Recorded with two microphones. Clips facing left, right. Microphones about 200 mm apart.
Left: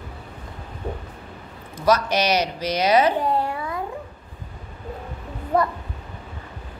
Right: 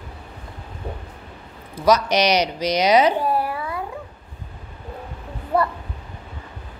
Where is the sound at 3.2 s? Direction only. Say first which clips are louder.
Right 1 dB; 25° left (ahead or behind).